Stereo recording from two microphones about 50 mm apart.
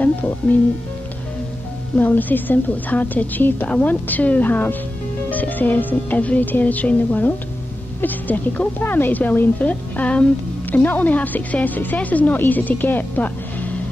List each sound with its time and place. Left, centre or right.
2.0 s a woman's voice: left